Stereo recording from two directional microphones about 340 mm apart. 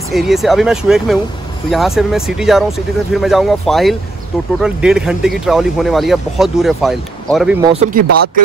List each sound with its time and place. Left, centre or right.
0.1 s speech: centre
7.6 s speech: centre